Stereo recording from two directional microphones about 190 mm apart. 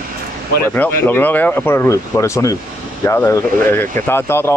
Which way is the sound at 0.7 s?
10° left (ahead or behind).